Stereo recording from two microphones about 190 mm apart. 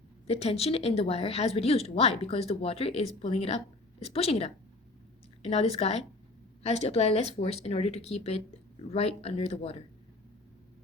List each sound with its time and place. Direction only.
0.3 s a woman's voice: 35° left (ahead or behind)